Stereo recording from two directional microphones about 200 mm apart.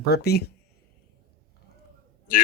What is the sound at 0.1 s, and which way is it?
Speech, 55° left (ahead or behind).